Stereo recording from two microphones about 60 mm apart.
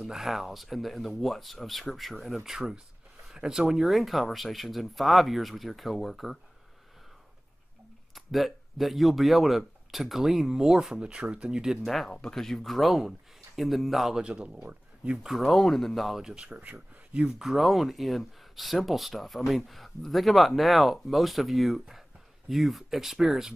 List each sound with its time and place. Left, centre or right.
0.0 s speech: centre
8.1 s speech: centre
14.2 s speech: centre
15.2 s speech: centre
16.3 s speech: right
17.4 s speech: centre